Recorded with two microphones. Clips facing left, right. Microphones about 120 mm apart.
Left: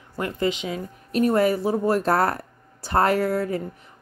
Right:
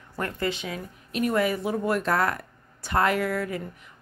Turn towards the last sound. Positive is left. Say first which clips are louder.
# left 4 dB
turn(degrees=35)  # may be behind; listen again after turning